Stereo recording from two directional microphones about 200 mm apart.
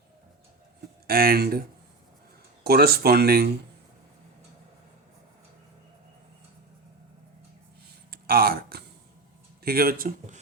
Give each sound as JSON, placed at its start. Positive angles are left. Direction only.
{"t": 1.0, "sound": "speech", "side_deg": -50}
{"t": 2.6, "sound": "speech", "side_deg": -50}
{"t": 8.1, "sound": "a sound", "side_deg": -50}
{"t": 9.6, "sound": "speech", "side_deg": -50}